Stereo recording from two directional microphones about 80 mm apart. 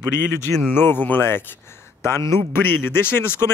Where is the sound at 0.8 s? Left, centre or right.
Left.